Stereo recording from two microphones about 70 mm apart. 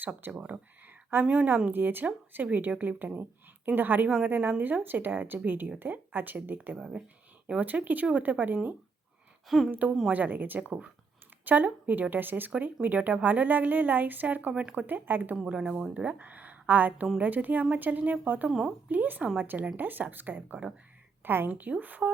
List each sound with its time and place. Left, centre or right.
0.0 s a woman's voice: right
1.7 s a woman's voice: right
6.7 s speech: centre
7.4 s a woman's voice: centre
9.5 s a woman's voice: centre
10.1 s a woman's voice: right
15.4 s a woman's voice: centre
18.4 s speech: centre
18.9 s a woman's voice: right